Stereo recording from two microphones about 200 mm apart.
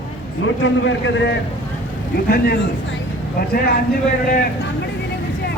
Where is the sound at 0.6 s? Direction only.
65° left (ahead or behind).